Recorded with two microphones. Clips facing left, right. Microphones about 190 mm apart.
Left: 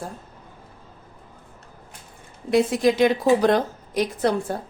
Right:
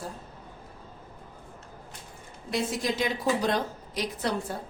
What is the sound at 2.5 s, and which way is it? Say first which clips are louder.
A woman's voice: left 10 dB; 60° left (ahead or behind).